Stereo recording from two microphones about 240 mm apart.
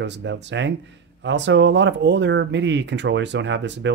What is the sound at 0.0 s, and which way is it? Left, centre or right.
Speech, right.